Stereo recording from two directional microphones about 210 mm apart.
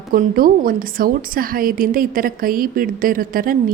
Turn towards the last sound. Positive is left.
turn(degrees=-45)  # may be behind; listen again after turning